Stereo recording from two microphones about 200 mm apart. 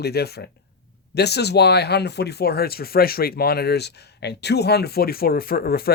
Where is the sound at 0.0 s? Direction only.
55° left (ahead or behind).